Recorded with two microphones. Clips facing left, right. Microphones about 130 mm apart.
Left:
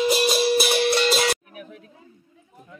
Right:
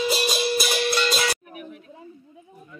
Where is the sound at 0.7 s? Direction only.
40° left (ahead or behind).